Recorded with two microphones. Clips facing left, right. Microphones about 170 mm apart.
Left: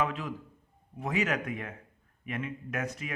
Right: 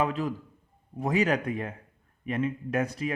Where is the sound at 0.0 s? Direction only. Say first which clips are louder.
Right 4 dB; 35° right (ahead or behind).